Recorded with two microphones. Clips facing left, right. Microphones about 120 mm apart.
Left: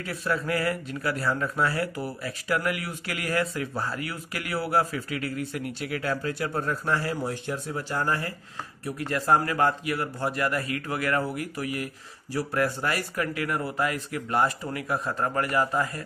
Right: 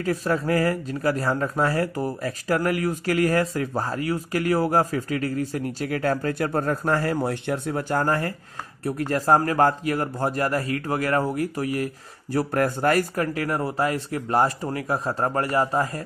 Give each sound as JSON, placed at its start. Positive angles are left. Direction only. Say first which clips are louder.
{"t": 0.0, "sound": "speech", "louder": "right 5 dB", "side_deg": -35}